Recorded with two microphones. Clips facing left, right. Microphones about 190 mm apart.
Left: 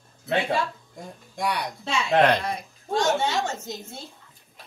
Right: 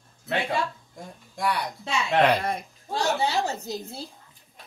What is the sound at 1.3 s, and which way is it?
Speech, centre (ahead or behind).